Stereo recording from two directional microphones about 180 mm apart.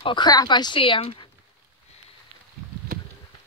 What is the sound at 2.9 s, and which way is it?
Bee, 50° right (ahead or behind).